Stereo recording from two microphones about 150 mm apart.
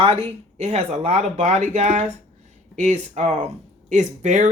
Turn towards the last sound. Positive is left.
turn(degrees=-55)  # may be behind; listen again after turning